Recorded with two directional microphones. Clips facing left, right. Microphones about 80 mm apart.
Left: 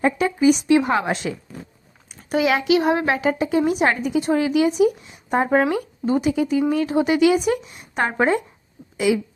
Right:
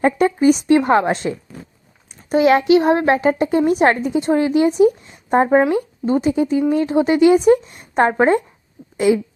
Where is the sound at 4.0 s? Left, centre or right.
Right.